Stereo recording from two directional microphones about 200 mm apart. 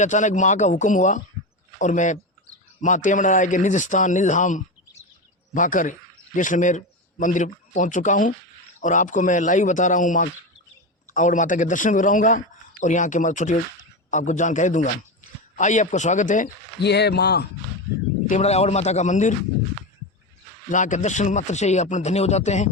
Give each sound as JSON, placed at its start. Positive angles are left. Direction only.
{"t": 0.0, "sound": "a man's voice", "side_deg": 35}
{"t": 16.8, "sound": "a man's voice", "side_deg": 55}
{"t": 18.3, "sound": "a man's voice", "side_deg": 35}
{"t": 20.7, "sound": "a man's voice", "side_deg": 40}